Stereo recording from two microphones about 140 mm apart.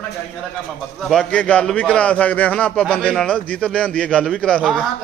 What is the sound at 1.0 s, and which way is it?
A man's voice, centre (ahead or behind).